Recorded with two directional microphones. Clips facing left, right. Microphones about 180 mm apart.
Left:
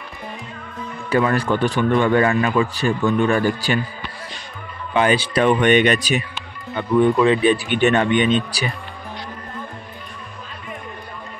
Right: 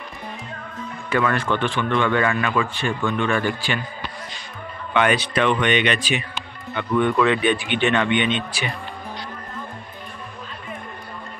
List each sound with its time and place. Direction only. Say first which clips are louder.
1.1 s speech: left 3 dB; 35° left (ahead or behind)
4.9 s speech: left 2 dB; 30° left (ahead or behind)